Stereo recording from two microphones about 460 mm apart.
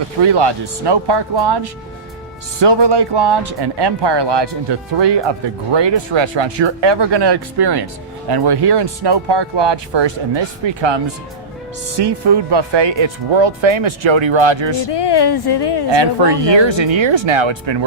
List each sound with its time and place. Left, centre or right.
0.2 s speech: right
14.8 s a woman's voice: left
15.9 s speech: right